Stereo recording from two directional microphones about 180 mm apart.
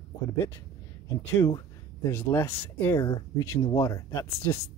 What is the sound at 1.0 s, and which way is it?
Speech, 20° left (ahead or behind).